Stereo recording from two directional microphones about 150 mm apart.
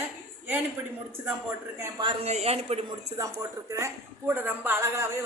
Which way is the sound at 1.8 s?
25° right (ahead or behind).